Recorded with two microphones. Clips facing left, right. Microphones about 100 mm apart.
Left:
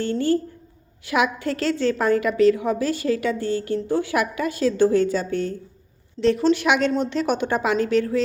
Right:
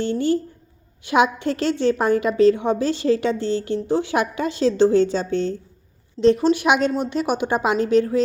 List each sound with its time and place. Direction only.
0.0 s a woman's voice: 20° right (ahead or behind)